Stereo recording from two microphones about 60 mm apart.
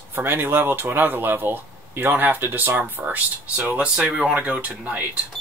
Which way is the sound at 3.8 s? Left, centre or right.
Centre.